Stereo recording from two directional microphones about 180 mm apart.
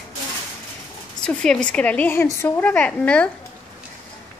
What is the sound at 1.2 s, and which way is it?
A woman's voice, 5° left (ahead or behind).